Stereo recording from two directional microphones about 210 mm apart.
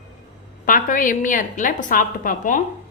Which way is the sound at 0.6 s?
40° left (ahead or behind).